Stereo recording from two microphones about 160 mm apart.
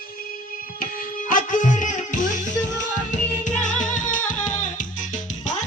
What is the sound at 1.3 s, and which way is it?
Music, 55° left (ahead or behind).